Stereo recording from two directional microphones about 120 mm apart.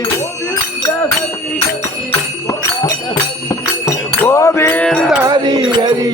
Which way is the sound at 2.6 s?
35° left (ahead or behind).